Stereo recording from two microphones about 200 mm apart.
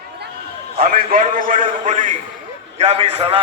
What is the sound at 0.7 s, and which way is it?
A man's voice, 45° right (ahead or behind).